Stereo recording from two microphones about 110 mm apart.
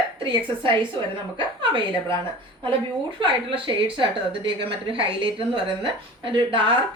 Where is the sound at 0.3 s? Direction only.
50° right (ahead or behind).